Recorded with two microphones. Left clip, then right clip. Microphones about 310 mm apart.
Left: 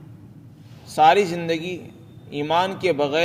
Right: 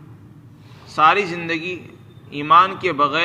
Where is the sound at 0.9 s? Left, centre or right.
Left.